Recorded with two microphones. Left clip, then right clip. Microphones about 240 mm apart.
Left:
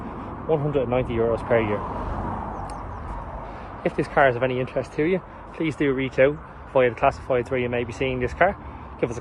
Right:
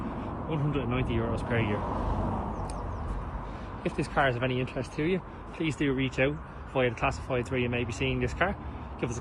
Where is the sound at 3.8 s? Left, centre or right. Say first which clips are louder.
Left 8 dB; centre.